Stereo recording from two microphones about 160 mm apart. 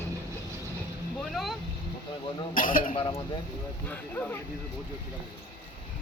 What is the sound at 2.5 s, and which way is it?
Speech, 60° left (ahead or behind).